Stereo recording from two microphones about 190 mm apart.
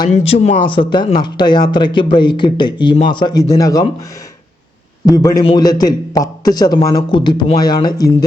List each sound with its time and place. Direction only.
0.1 s speech: 30° left (ahead or behind)
5.0 s speech: 20° left (ahead or behind)